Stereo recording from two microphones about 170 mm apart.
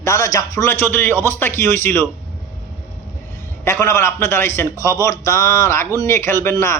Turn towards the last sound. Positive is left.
turn(degrees=15)  # may be behind; listen again after turning